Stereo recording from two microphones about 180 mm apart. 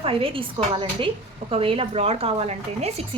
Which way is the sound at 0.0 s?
30° right (ahead or behind).